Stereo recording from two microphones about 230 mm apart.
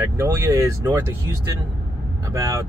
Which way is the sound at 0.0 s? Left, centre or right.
Centre.